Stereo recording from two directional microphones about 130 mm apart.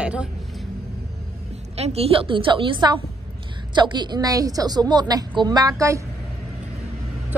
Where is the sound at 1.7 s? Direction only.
50° right (ahead or behind); by 6.0 s 25° right (ahead or behind).